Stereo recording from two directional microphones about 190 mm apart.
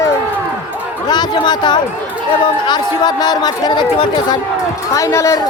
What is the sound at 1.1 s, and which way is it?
Speech, 20° left (ahead or behind).